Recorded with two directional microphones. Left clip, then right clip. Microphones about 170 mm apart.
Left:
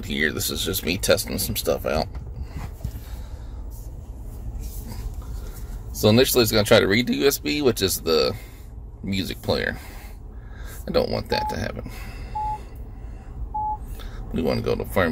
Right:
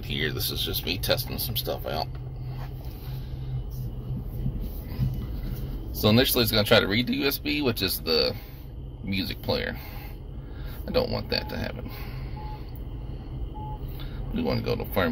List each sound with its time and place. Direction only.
0.0 s speech: 40° left (ahead or behind)
5.9 s speech: 35° left (ahead or behind)
10.9 s speech: 35° left (ahead or behind)
14.3 s speech: 40° left (ahead or behind)